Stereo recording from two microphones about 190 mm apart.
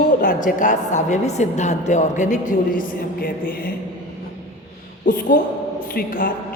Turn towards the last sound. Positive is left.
turn(degrees=45)  # may be behind; listen again after turning